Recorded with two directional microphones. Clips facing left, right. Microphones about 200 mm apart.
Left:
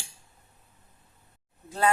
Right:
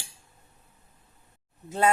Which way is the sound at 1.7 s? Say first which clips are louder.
Right 2 dB; 25° right (ahead or behind).